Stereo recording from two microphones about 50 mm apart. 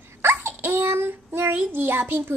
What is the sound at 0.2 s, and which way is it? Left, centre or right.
A child's voice, right.